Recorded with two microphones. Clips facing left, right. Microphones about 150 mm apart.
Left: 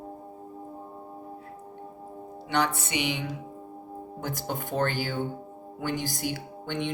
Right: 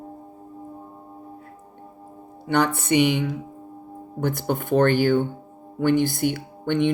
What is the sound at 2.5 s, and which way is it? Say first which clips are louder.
Music: right 7 dB; 55° right (ahead or behind).